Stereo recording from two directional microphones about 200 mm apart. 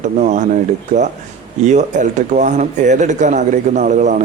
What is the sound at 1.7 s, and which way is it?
Speech, 35° right (ahead or behind).